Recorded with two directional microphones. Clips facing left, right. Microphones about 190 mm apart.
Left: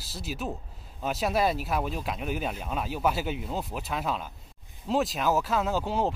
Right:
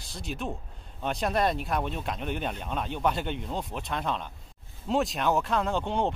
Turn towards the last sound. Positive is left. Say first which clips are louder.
# even
turn(degrees=5)  # may be behind; listen again after turning